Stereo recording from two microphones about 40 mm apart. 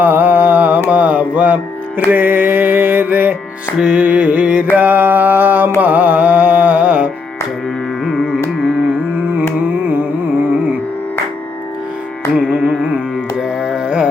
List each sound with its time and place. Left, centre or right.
0.0 s music: right
0.9 s carnatic music: right
2.0 s a sound: right
3.8 s a sound: right
5.8 s carnatic music: right
8.1 s carnatic music: left
9.6 s carnatic music: right
12.3 s carnatic music: right
13.4 s carnatic music: right